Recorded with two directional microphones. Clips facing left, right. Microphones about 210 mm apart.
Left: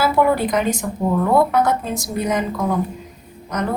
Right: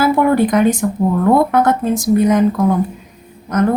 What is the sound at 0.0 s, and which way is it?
A woman's voice, 50° right (ahead or behind).